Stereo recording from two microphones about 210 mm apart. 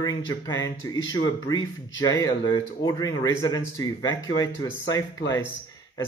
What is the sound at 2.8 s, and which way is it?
Speech, 15° left (ahead or behind).